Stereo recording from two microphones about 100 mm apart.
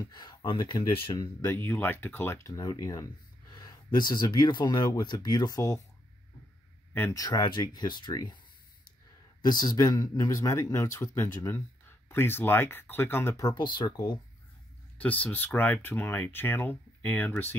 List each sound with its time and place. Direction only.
0.0 s speech: 45° left (ahead or behind)
1.4 s speech: 20° left (ahead or behind)
2.4 s speech: 35° left (ahead or behind)
6.9 s speech: 20° left (ahead or behind)
7.2 s speech: 40° left (ahead or behind)
9.4 s speech: 45° left (ahead or behind); by 13.4 s 25° left (ahead or behind)
13.4 s speech: 45° left (ahead or behind)
15.0 s speech: 15° left (ahead or behind)